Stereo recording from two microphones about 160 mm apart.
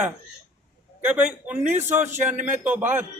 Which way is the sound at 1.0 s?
10° right (ahead or behind).